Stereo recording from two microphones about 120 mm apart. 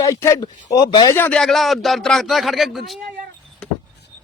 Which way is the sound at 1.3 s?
5° left (ahead or behind).